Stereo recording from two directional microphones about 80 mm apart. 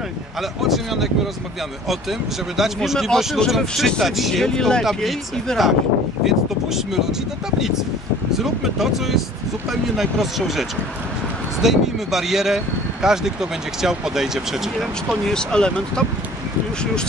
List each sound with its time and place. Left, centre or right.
0.4 s speech: centre
15.2 s speech: centre